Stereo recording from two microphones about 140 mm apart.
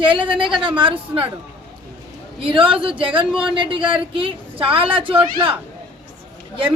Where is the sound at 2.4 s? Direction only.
40° right (ahead or behind).